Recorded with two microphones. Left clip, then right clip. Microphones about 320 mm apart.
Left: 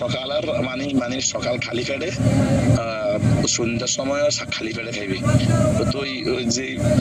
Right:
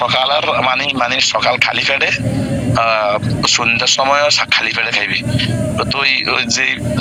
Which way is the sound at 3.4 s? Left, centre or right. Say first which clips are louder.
Right 10 dB; centre.